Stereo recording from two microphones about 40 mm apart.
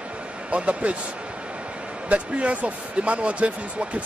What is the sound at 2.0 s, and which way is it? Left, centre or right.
Speech, right.